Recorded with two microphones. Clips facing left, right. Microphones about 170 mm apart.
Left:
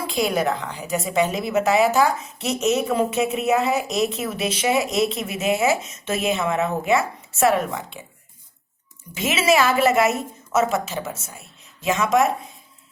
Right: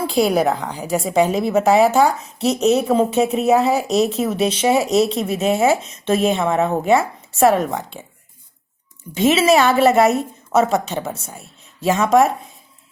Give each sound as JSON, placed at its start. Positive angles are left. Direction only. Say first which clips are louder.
{"t": 0.1, "sound": "a woman's voice", "louder": "right 5 dB", "side_deg": -35}
{"t": 9.1, "sound": "a woman's voice", "louder": "right 5 dB", "side_deg": -35}